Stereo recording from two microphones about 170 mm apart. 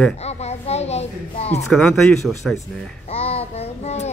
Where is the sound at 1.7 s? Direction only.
Centre (ahead or behind).